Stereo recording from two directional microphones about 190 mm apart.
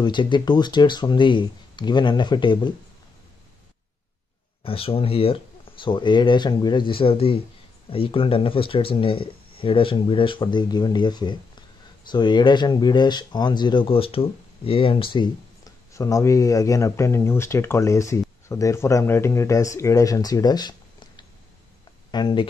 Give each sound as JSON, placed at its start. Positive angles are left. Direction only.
{"t": 0.0, "sound": "speech", "side_deg": 25}
{"t": 4.6, "sound": "speech", "side_deg": 30}